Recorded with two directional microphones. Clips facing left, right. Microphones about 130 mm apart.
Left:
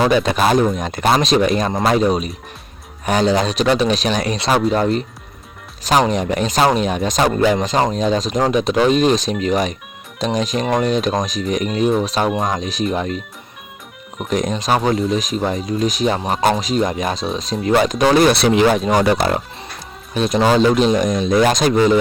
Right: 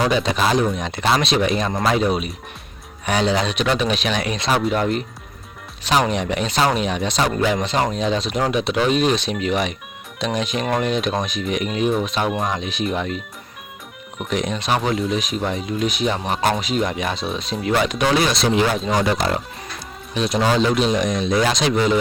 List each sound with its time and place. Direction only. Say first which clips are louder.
0.2 s speech: left 4 dB; 50° left (ahead or behind)
14.3 s speech: left 4 dB; 40° left (ahead or behind)
18.3 s speech: left 5 dB; 65° left (ahead or behind)
20.1 s speech: left 4 dB; 45° left (ahead or behind)